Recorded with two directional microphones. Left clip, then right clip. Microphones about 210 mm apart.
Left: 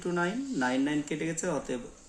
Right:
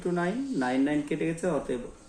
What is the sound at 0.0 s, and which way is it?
Speech, 45° left (ahead or behind).